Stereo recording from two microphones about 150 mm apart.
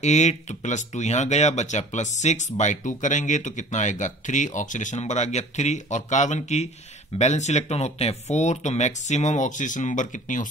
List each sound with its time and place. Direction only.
0.0 s speech: 50° left (ahead or behind)